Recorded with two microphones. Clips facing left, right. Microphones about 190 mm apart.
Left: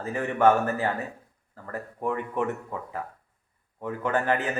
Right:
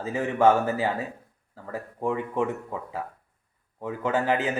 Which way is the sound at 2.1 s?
10° right (ahead or behind).